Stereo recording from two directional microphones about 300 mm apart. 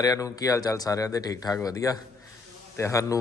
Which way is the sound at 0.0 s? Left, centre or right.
Centre.